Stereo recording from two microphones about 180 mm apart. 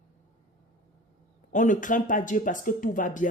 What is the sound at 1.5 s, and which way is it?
A woman's voice, 45° left (ahead or behind).